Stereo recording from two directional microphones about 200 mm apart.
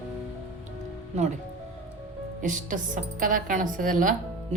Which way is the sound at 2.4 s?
40° right (ahead or behind).